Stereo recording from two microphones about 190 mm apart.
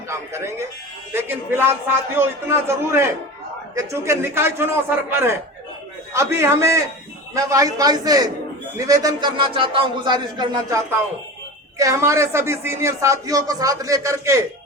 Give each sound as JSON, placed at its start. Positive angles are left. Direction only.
{"t": 0.1, "sound": "a man's voice", "side_deg": -15}
{"t": 11.8, "sound": "a man's voice", "side_deg": -15}